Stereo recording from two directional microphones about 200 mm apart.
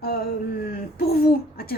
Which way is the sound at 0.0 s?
50° left (ahead or behind).